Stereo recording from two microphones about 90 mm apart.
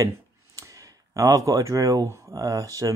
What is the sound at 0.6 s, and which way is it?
Speech, 40° right (ahead or behind).